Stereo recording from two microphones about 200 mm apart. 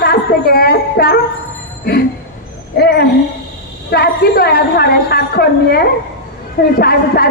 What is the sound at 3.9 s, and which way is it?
A woman's voice, 50° left (ahead or behind).